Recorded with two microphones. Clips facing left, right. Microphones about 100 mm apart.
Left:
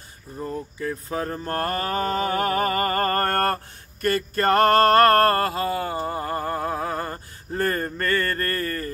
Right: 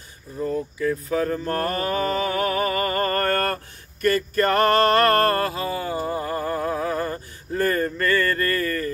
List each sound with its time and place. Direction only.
0.7 s speech: 35° left (ahead or behind)